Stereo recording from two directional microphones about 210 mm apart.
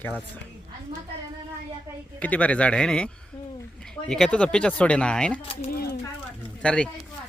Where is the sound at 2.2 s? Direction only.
5° left (ahead or behind).